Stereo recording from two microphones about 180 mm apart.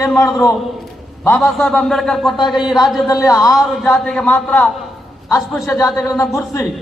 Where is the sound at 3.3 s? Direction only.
20° left (ahead or behind).